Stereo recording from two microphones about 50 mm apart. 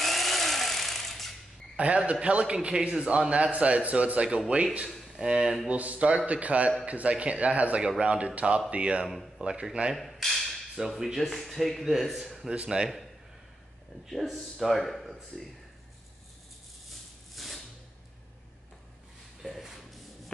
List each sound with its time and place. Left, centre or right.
0.0 s power tool: centre
1.8 s speech: right
5.7 s speech: right
9.9 s mechanisms: centre
11.1 s speech: centre
14.0 s speech: centre
17.4 s a sound: centre
19.4 s shuffle: centre